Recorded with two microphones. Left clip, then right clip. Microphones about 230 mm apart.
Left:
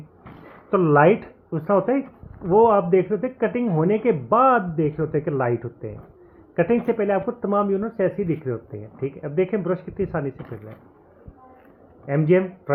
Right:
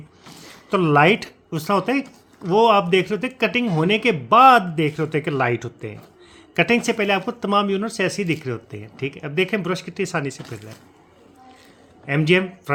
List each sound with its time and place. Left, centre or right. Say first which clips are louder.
0.7 s speech: even; right
12.0 s speech: right 1 dB; right